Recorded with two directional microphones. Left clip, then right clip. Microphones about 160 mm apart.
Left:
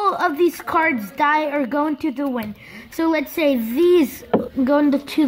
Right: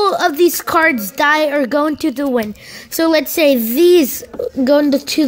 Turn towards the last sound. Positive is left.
turn(degrees=-20)  # may be behind; listen again after turning